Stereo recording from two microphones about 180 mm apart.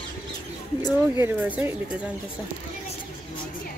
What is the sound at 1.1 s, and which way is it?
Speech, 10° right (ahead or behind).